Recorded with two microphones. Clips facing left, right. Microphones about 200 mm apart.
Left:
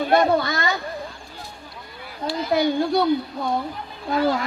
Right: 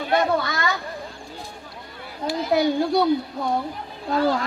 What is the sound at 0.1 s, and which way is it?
Speech, 35° left (ahead or behind).